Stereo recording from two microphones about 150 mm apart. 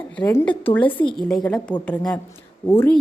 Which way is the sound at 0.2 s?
25° left (ahead or behind).